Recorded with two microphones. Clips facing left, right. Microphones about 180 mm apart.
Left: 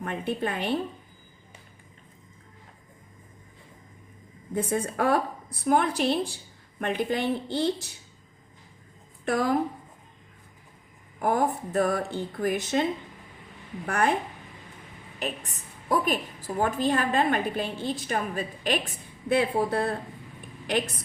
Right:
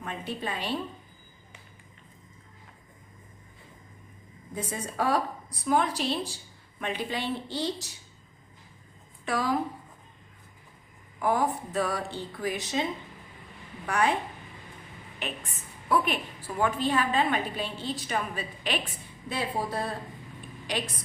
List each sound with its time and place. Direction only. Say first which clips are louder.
0.0 s a woman's voice: left 5 dB; 55° left (ahead or behind)
4.5 s a woman's voice: left 6 dB; 60° left (ahead or behind)
9.2 s a woman's voice: left 3 dB; 50° left (ahead or behind)
11.2 s a woman's voice: left 2 dB; 50° left (ahead or behind)
15.2 s a woman's voice: left 4 dB; 40° left (ahead or behind)